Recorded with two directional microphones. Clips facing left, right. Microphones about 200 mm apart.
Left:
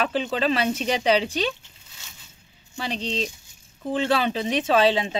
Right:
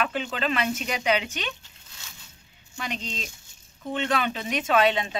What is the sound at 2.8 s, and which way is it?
Speech, 30° left (ahead or behind).